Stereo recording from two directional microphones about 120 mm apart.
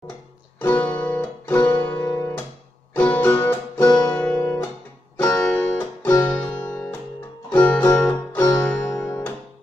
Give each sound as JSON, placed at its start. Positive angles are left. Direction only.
{"t": 0.6, "sound": "music", "side_deg": 15}
{"t": 3.0, "sound": "music", "side_deg": 15}
{"t": 3.4, "sound": "guitar", "side_deg": 15}
{"t": 3.9, "sound": "music", "side_deg": 30}
{"t": 4.2, "sound": "music", "side_deg": 20}